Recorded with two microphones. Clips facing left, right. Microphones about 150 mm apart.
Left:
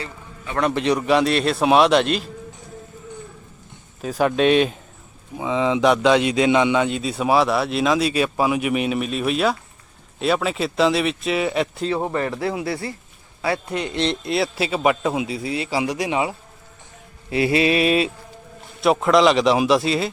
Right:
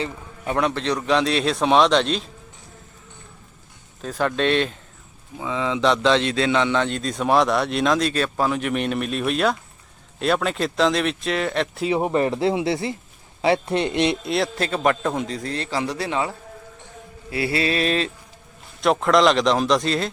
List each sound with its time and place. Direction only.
0.7 s a man's voice: 10° left (ahead or behind)
4.0 s a man's voice: 10° left (ahead or behind)
11.9 s speech: 15° right (ahead or behind)
14.2 s a man's voice: centre (ahead or behind)
17.3 s a man's voice: 20° left (ahead or behind)